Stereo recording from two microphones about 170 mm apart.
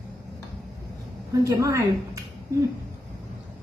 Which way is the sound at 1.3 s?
20° right (ahead or behind).